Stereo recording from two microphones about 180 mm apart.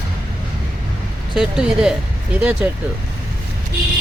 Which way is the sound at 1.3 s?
5° right (ahead or behind).